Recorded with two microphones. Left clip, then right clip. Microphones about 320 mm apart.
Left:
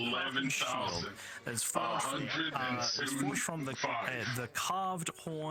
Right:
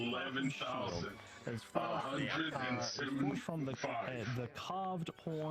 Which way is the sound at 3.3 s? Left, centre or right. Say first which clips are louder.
Left 5 dB; left.